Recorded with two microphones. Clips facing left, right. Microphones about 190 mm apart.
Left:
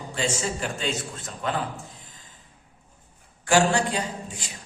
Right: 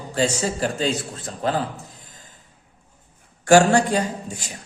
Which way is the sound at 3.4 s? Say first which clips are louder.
Right 6 dB; 45° right (ahead or behind).